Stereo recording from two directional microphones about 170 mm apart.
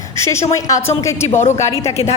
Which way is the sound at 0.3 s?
20° left (ahead or behind).